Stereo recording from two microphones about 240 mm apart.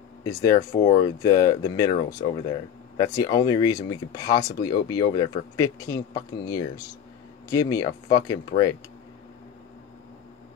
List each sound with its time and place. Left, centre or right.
0.2 s speech: centre